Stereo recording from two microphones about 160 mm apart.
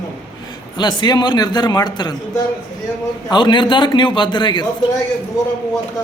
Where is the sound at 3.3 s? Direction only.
30° left (ahead or behind).